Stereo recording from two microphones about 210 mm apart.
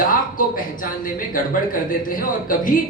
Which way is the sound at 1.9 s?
40° left (ahead or behind).